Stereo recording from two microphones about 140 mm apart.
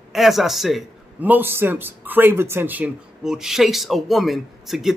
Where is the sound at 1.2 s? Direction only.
15° right (ahead or behind).